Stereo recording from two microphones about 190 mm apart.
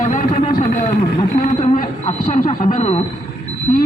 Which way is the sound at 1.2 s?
35° left (ahead or behind).